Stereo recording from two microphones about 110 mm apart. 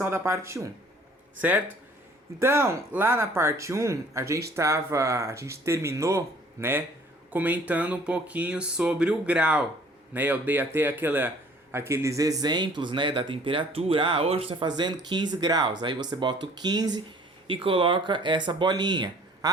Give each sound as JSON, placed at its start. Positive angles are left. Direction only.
{"t": 0.0, "sound": "speech", "side_deg": -25}
{"t": 1.4, "sound": "speech", "side_deg": -15}
{"t": 17.5, "sound": "speech", "side_deg": -50}